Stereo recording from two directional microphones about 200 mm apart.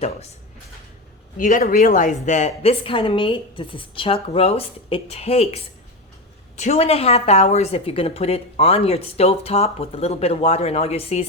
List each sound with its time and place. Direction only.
1.4 s a woman's voice: 40° left (ahead or behind)